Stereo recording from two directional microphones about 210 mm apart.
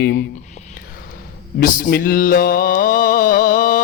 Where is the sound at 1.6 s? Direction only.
45° left (ahead or behind).